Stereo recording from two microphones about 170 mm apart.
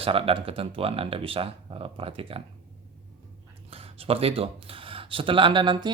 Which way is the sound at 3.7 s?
35° right (ahead or behind).